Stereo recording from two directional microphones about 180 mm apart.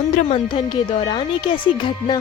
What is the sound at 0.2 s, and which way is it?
A woman's voice, 35° left (ahead or behind).